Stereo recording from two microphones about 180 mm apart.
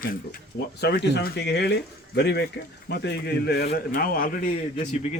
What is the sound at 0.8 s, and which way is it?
A man's voice, 65° left (ahead or behind).